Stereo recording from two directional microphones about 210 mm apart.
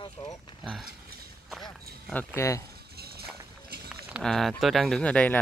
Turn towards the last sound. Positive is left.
turn(degrees=5)  # may be behind; listen again after turning